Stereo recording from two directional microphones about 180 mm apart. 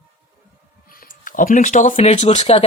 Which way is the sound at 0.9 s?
50° left (ahead or behind).